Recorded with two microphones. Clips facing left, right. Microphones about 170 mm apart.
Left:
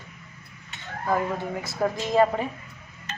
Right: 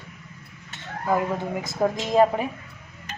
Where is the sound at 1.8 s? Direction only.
15° right (ahead or behind).